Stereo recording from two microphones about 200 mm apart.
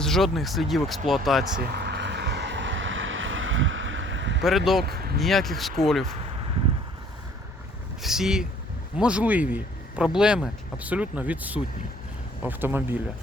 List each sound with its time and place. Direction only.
0.0 s speech: centre (ahead or behind)
1.7 s vehicle: 55° right (ahead or behind)
4.4 s speech: centre (ahead or behind)
4.8 s speech: 50° right (ahead or behind)
5.2 s speech: centre (ahead or behind)
8.0 s speech: centre (ahead or behind)